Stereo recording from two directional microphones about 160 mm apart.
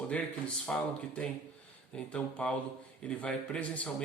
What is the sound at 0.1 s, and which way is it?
Speech, 5° left (ahead or behind).